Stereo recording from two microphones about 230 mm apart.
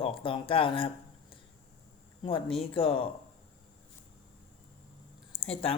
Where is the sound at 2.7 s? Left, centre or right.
Left.